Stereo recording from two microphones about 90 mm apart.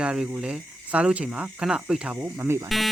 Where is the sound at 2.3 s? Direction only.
30° right (ahead or behind).